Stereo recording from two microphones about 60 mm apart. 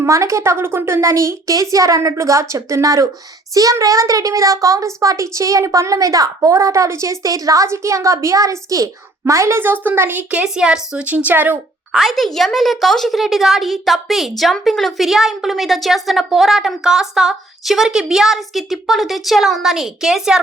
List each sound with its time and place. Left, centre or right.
0.0 s speech: right
1.0 s a child's voice: right
7.7 s a child's voice: right
9.6 s a woman's voice: right
10.3 s a woman's voice: centre
11.9 s a woman's voice: centre